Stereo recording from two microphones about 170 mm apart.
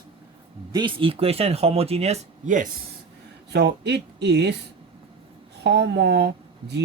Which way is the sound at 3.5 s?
80° right.